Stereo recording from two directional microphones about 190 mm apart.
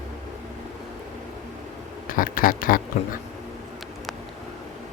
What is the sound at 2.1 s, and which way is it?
Speech, 45° left (ahead or behind).